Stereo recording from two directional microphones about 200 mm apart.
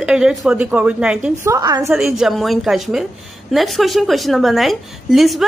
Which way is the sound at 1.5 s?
20° right (ahead or behind).